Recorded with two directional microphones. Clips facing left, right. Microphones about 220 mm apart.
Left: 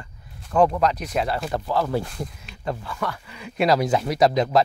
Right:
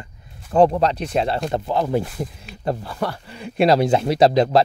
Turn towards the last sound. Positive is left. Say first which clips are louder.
# right 4 dB
turn(degrees=-30)  # may be behind; listen again after turning